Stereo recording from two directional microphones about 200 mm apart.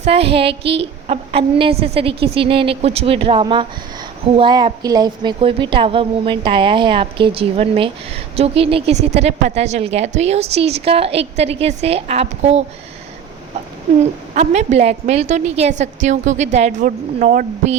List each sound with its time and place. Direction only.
0.0 s a woman's voice: 30° right (ahead or behind)
14.0 s a woman's voice: 35° right (ahead or behind)